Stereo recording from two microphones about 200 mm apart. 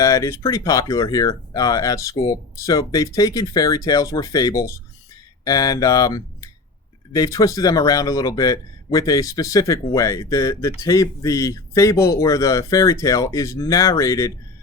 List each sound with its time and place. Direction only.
0.0 s speech: 15° left (ahead or behind)